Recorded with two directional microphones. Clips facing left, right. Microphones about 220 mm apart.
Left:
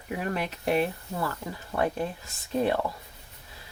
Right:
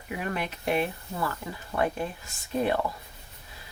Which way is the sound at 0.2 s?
40° left (ahead or behind).